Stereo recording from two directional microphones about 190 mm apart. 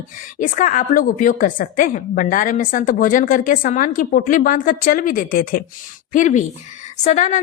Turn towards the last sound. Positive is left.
turn(degrees=40)  # may be behind; listen again after turning